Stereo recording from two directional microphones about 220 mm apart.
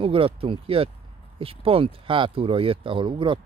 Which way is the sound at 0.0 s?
25° right (ahead or behind).